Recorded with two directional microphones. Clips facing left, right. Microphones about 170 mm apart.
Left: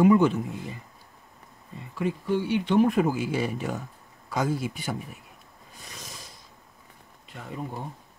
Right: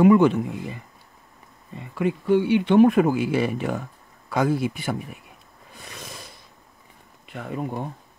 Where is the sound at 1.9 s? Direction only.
60° right (ahead or behind).